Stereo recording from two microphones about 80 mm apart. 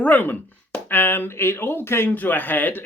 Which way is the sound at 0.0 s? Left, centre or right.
Left.